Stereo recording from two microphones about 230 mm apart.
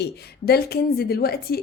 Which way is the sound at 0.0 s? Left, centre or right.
Left.